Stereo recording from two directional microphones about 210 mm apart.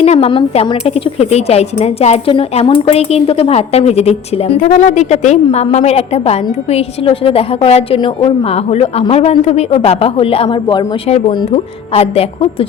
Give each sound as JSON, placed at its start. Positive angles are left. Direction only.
{"t": 0.0, "sound": "a woman's voice", "side_deg": 30}